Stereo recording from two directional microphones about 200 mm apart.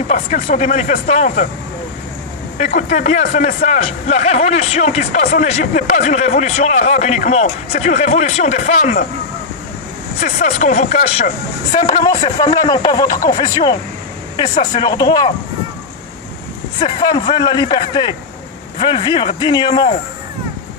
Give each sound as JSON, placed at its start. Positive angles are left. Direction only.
{"t": 0.1, "sound": "speech", "side_deg": 30}
{"t": 2.6, "sound": "speech", "side_deg": 35}
{"t": 10.2, "sound": "speech", "side_deg": 35}
{"t": 16.8, "sound": "speech", "side_deg": 20}